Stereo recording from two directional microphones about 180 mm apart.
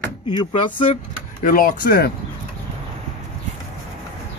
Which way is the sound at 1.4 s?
50° left (ahead or behind).